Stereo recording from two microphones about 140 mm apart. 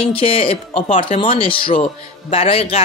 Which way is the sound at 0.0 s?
40° left (ahead or behind).